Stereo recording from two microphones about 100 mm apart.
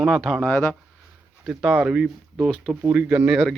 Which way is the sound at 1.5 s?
10° right (ahead or behind).